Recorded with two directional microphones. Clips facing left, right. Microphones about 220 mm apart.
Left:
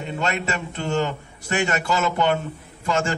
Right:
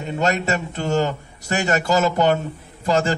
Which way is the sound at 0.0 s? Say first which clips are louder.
Right 4 dB; 40° right (ahead or behind).